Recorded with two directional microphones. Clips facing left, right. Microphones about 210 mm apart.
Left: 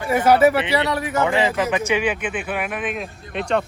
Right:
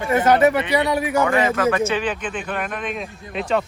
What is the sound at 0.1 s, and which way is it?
Speech, 10° left (ahead or behind).